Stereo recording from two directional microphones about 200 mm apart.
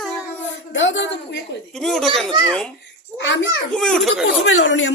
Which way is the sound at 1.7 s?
Centre (ahead or behind).